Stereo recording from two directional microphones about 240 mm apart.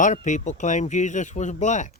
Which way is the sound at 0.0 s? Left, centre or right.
Left.